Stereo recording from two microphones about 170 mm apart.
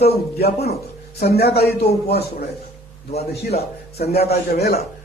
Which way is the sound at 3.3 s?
70° left (ahead or behind).